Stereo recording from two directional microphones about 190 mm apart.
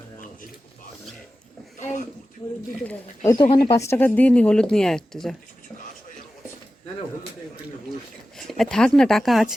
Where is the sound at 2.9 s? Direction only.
15° left (ahead or behind).